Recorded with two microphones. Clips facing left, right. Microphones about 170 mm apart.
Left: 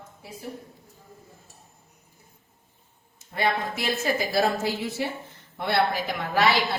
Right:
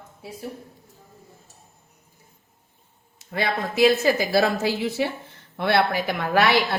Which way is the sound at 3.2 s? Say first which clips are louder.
Even; 85° right.